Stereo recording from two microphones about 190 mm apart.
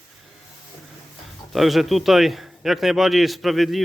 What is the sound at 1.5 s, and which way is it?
A man's voice, centre (ahead or behind).